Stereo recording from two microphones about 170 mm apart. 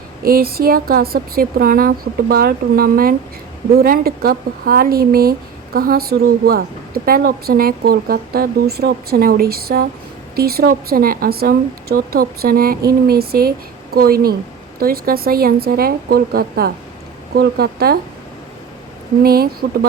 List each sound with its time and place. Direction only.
0.3 s speech: 60° right (ahead or behind)
19.2 s speech: 60° right (ahead or behind)